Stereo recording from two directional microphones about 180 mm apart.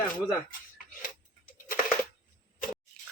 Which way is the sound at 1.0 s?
50° left (ahead or behind).